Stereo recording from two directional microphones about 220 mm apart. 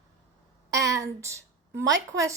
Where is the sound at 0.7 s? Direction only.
15° right (ahead or behind).